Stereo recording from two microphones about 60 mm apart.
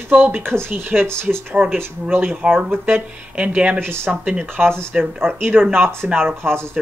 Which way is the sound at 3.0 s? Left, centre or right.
Right.